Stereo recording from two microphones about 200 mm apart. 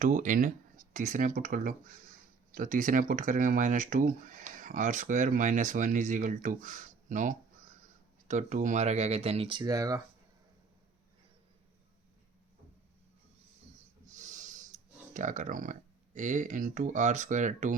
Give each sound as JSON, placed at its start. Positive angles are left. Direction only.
{"t": 0.0, "sound": "speech", "side_deg": -40}
{"t": 14.2, "sound": "a sound", "side_deg": -40}
{"t": 15.1, "sound": "speech", "side_deg": -40}